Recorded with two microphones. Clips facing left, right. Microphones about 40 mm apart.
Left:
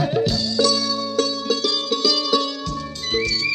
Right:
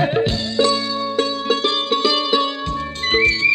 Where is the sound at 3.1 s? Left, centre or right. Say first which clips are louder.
Right 7 dB; right.